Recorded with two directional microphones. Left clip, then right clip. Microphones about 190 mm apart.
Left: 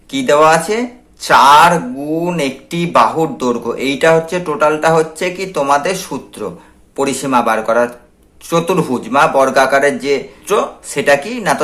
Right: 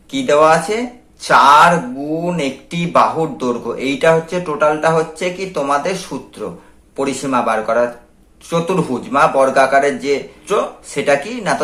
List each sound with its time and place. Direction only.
0.1 s speech: 25° left (ahead or behind)